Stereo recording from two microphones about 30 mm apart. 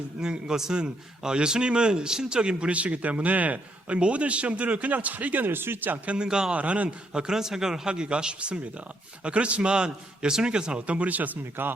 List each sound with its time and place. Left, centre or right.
0.2 s speech: right
0.8 s speech: right
3.8 s a man's voice: right
6.2 s speech: centre
6.5 s speech: right
7.1 s speech: right
7.3 s a man's voice: centre
7.9 s a man's voice: right
10.8 s speech: right
11.6 s speech: right